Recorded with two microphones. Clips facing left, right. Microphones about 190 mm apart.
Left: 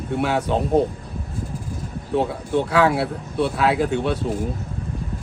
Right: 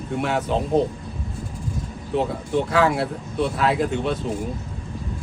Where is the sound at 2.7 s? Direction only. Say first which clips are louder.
Left 2 dB; 5° left (ahead or behind).